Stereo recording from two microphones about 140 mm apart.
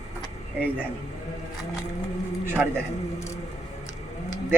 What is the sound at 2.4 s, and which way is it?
Speech, 15° right (ahead or behind).